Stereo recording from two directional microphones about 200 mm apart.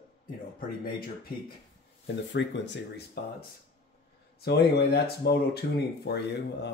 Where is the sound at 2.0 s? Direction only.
60° left (ahead or behind).